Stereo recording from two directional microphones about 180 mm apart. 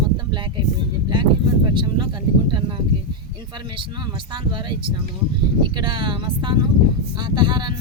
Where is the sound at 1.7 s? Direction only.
25° right (ahead or behind).